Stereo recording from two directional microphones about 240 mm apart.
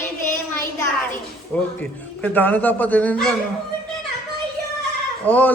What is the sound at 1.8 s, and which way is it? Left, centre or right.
A man's voice, centre.